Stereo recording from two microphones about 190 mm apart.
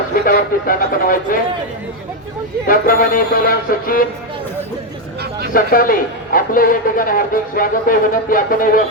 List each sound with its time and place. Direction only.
0.1 s a man's voice: 45° left (ahead or behind)
2.6 s a man's voice: 50° left (ahead or behind)
5.5 s a man's voice: 50° left (ahead or behind)